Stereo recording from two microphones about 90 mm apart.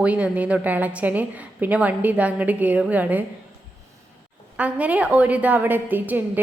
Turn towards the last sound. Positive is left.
turn(degrees=-20)  # may be behind; listen again after turning